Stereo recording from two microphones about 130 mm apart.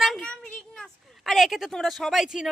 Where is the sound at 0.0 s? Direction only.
Centre (ahead or behind).